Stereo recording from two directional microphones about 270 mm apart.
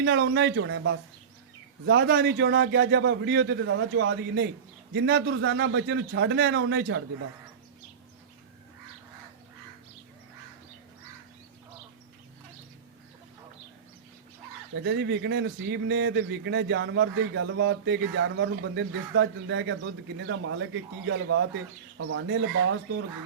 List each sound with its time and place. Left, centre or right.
0.0 s a man's voice: right
14.8 s a man's voice: right